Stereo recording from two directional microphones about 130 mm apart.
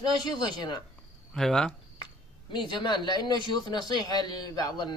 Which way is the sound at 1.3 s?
5° left (ahead or behind).